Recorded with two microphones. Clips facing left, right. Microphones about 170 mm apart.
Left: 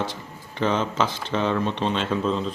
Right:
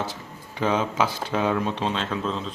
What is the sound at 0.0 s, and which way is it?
Speech, 5° right (ahead or behind).